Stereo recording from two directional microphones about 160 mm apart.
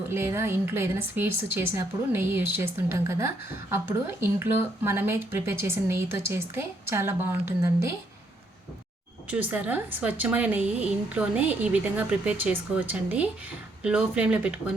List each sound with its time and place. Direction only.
0.1 s a woman's voice: 15° right (ahead or behind)
9.3 s a woman's voice: 10° right (ahead or behind)